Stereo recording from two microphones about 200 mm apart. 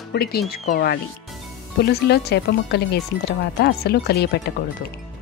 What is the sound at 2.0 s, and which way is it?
Speech, 55° left (ahead or behind).